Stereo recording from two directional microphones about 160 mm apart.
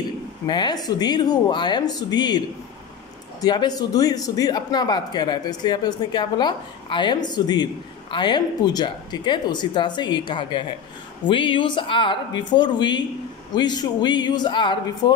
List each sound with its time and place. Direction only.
0.5 s speech: 25° left (ahead or behind)